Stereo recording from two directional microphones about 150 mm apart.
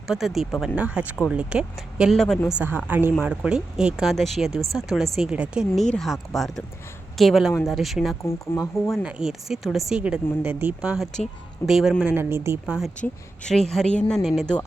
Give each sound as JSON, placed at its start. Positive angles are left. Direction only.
{"t": 0.1, "sound": "speech", "side_deg": 0}
{"t": 2.5, "sound": "speech", "side_deg": -10}
{"t": 8.2, "sound": "speech", "side_deg": 15}
{"t": 9.0, "sound": "speech", "side_deg": -5}
{"t": 12.6, "sound": "speech", "side_deg": -5}